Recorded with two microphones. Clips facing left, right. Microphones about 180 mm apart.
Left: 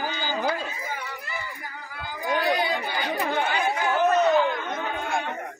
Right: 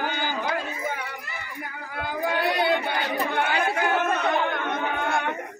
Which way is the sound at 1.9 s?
60° right (ahead or behind).